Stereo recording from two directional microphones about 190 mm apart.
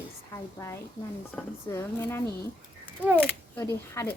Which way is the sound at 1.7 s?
15° left (ahead or behind).